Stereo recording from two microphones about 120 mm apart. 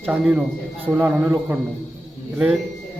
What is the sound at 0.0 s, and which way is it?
A man's voice, 10° right (ahead or behind).